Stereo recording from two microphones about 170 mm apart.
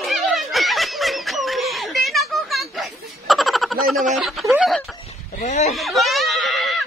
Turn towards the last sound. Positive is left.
turn(degrees=0)  # may be behind; listen again after turning